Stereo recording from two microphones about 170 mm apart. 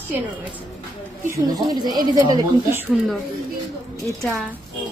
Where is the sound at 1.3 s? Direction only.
20° right (ahead or behind).